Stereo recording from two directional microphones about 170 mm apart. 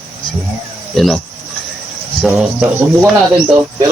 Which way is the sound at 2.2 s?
5° right (ahead or behind).